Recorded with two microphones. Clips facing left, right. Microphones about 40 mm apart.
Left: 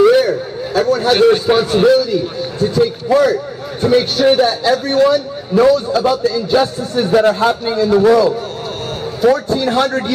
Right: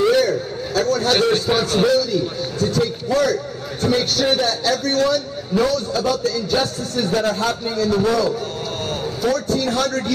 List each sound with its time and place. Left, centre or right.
0.0 s a man's voice: centre